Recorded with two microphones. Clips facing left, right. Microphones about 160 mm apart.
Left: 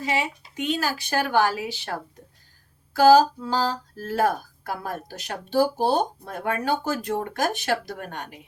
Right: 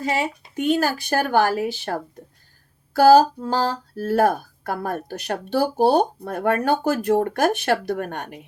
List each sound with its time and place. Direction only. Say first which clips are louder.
0.0 s speech: right 3 dB; 45° right (ahead or behind); by 8.4 s 60° right (ahead or behind)